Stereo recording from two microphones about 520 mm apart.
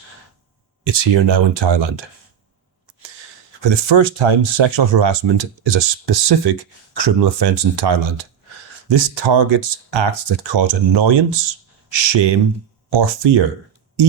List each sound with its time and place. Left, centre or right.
0.9 s speech: right
3.6 s speech: right